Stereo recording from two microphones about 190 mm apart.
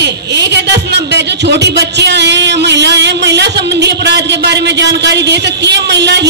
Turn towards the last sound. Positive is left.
turn(degrees=-65)  # may be behind; listen again after turning